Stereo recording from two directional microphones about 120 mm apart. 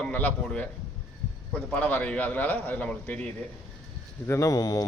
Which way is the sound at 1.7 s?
10° left (ahead or behind).